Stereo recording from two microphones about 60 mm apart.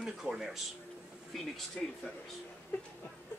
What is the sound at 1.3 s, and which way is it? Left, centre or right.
Speech, centre.